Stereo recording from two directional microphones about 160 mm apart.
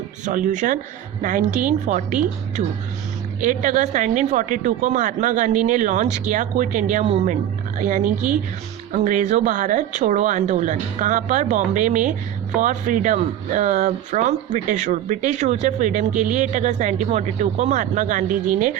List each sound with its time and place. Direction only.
0.3 s speech: 55° right (ahead or behind)
3.4 s speech: 55° right (ahead or behind)
7.8 s speech: 55° right (ahead or behind)